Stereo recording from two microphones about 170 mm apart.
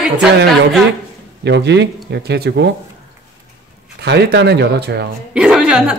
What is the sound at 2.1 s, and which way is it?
Speech, 75° right (ahead or behind).